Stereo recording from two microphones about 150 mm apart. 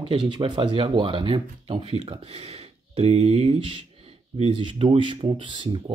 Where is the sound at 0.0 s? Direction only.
30° right (ahead or behind).